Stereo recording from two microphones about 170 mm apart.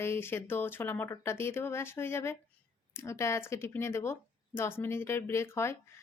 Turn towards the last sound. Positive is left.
turn(degrees=15)  # may be behind; listen again after turning